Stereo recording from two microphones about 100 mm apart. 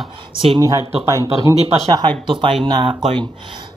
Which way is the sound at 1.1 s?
30° right (ahead or behind).